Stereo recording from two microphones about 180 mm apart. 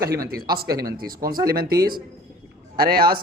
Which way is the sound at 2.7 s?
55° right (ahead or behind).